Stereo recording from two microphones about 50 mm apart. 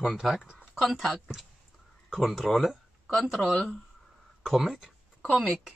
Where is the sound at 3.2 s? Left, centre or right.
Centre.